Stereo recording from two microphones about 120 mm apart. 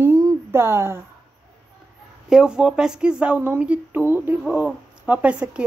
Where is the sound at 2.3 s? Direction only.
5° right (ahead or behind).